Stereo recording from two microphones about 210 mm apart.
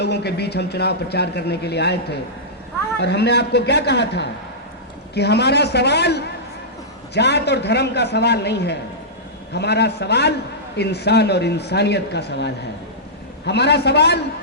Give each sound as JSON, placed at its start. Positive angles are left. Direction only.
{"t": 0.0, "sound": "a man's voice", "side_deg": 50}